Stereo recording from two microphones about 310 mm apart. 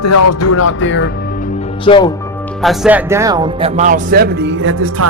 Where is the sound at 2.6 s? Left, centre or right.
Centre.